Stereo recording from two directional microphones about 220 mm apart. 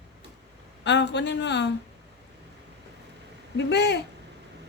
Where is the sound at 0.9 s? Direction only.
50° left (ahead or behind).